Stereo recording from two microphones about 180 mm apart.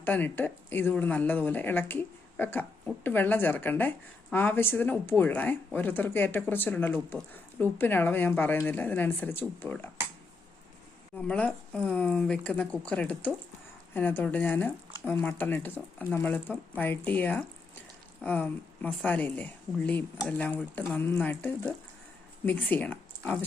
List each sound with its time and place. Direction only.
0.0 s speech: 10° left (ahead or behind)
11.3 s speech: 5° left (ahead or behind)